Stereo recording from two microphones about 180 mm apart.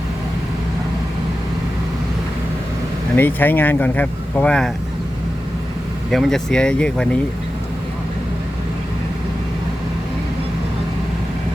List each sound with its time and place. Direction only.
3.2 s speech: 10° left (ahead or behind)
6.1 s speech: centre (ahead or behind)